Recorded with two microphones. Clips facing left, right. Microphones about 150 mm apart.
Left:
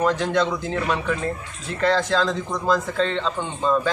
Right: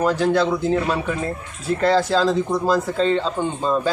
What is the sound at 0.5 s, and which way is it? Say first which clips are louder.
Speech: right 4 dB; 30° right (ahead or behind).